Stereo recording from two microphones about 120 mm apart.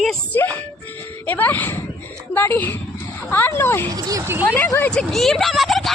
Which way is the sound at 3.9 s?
30° right (ahead or behind).